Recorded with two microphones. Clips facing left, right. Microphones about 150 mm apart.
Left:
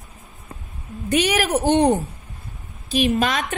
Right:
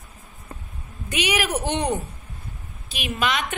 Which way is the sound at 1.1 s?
45° left (ahead or behind).